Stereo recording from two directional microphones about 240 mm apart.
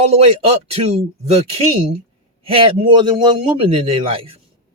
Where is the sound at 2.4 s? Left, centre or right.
Right.